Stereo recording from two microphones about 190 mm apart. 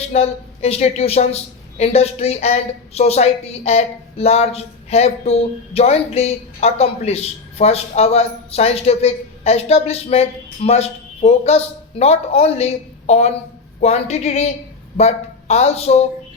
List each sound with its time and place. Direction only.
0.0 s a woman's voice: 35° left (ahead or behind)